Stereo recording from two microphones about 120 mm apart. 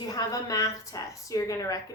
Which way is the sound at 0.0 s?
30° left (ahead or behind).